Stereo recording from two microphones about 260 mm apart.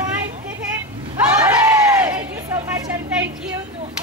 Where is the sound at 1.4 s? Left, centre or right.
Centre.